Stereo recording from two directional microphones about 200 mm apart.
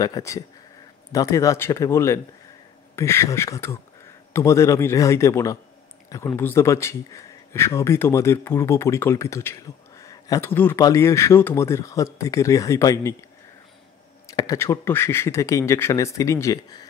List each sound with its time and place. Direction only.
0.0 s speech: 15° left (ahead or behind)
14.2 s speech: 15° left (ahead or behind)